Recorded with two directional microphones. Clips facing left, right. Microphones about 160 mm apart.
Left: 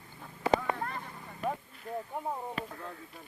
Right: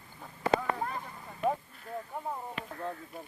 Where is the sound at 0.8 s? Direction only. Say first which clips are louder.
Right 2 dB; 10° right (ahead or behind).